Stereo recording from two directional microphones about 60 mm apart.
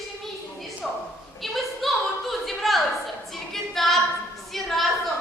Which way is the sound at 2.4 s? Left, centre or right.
Centre.